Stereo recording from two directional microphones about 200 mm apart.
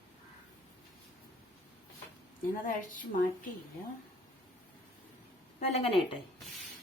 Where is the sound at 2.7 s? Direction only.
40° left (ahead or behind).